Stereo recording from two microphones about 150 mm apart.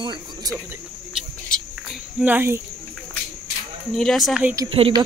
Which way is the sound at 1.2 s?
5° right (ahead or behind).